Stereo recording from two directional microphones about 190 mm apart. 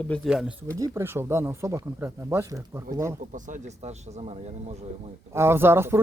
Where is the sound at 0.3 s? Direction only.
5° right (ahead or behind).